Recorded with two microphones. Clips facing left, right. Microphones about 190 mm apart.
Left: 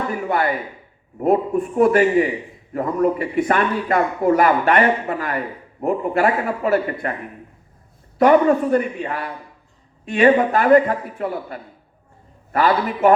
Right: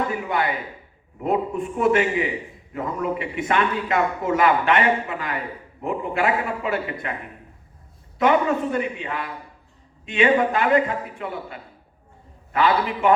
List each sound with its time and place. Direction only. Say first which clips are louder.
0.1 s a man's voice: left 4 dB; 45° left (ahead or behind)
8.2 s a man's voice: left 6 dB; 45° left (ahead or behind)